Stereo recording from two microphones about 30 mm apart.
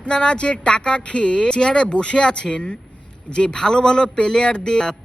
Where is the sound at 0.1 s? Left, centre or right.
Left.